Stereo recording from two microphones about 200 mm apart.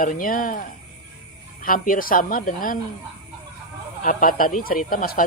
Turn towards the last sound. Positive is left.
turn(degrees=45)  # may be behind; listen again after turning